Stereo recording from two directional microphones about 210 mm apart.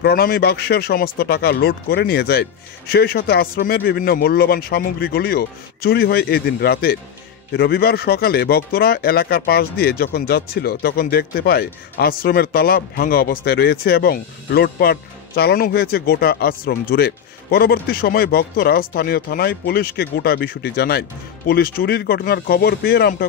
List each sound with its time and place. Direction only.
0.0 s speech: 45° left (ahead or behind)